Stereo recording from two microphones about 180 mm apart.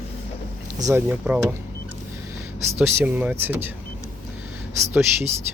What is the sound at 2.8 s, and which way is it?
Speech, 10° right (ahead or behind).